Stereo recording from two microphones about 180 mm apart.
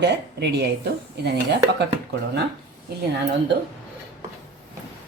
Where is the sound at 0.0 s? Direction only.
70° right (ahead or behind).